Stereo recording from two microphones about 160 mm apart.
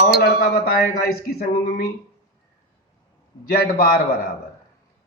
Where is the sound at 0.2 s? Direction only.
85° left.